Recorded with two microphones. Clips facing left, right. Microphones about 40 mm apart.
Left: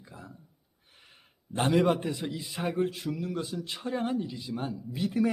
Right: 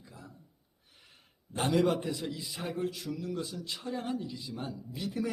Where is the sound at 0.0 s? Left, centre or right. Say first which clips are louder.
Left 4 dB; left.